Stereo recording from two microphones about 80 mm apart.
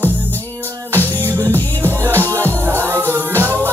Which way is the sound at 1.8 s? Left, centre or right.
Right.